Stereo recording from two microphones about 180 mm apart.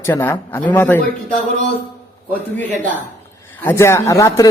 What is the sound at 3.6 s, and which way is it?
Speech, 10° left (ahead or behind).